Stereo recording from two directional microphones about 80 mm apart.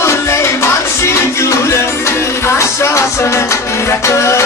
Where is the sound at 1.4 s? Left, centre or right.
Left.